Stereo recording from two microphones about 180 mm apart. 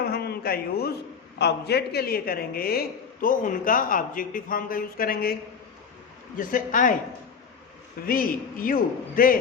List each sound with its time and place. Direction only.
0.0 s a sound: 60° left (ahead or behind)
1.4 s speech: 65° left (ahead or behind); by 6.9 s 45° left (ahead or behind)
8.0 s speech: 55° left (ahead or behind)